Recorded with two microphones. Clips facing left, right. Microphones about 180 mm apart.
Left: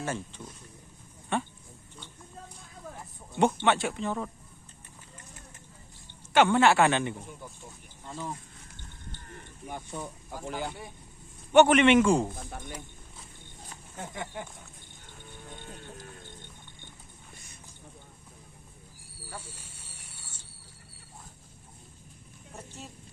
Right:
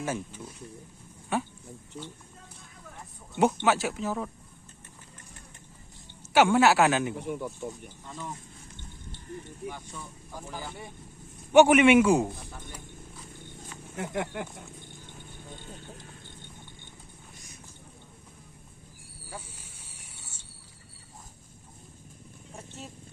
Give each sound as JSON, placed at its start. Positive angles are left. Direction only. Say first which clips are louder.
{"t": 0.0, "sound": "a man's voice", "louder": "right 2 dB", "side_deg": -10}
{"t": 3.3, "sound": "speech", "louder": "right 1 dB", "side_deg": -5}
{"t": 6.3, "sound": "a man's voice", "louder": "right 1 dB", "side_deg": -10}
{"t": 7.2, "sound": "speech", "louder": "right 11 dB", "side_deg": -70}
{"t": 9.9, "sound": "speech", "louder": "left 6 dB", "side_deg": 50}
{"t": 11.5, "sound": "a man's voice", "louder": "right 2 dB", "side_deg": -10}
{"t": 13.9, "sound": "speech", "louder": "right 6 dB", "side_deg": -75}
{"t": 19.3, "sound": "a sound", "louder": "right 1 dB", "side_deg": -10}
{"t": 22.5, "sound": "vehicle", "louder": "right 1 dB", "side_deg": 0}